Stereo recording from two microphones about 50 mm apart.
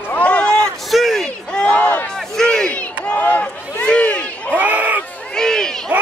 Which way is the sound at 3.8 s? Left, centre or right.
Left.